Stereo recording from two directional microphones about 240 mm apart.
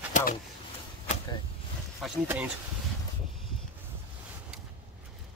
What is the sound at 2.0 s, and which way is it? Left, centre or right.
Speech, centre.